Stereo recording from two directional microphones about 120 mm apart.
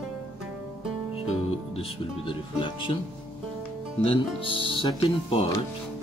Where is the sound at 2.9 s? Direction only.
50° left (ahead or behind).